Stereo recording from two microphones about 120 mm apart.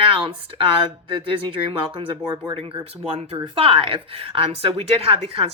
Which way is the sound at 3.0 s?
60° right (ahead or behind).